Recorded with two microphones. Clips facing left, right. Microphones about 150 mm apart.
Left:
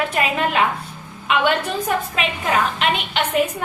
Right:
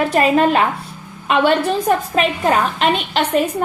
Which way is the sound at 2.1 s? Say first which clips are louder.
Right 5 dB; 40° right (ahead or behind).